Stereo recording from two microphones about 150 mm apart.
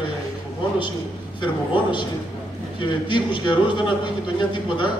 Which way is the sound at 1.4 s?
30° left (ahead or behind).